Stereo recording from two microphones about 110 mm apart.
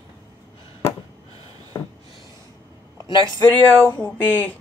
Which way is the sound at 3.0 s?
30° right (ahead or behind).